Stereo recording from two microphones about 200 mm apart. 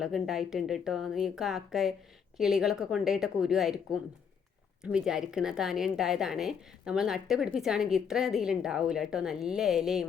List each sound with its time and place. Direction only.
0.0 s a woman's voice: centre (ahead or behind)